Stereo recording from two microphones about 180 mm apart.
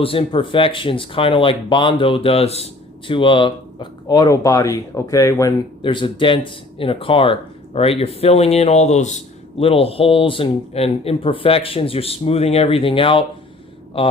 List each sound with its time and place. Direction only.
0.0 s speech: 30° left (ahead or behind)